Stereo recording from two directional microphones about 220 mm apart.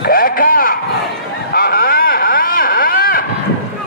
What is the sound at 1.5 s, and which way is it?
Vehicle, 40° left (ahead or behind).